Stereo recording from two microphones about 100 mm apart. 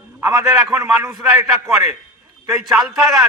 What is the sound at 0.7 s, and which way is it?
A man's voice, 25° right (ahead or behind).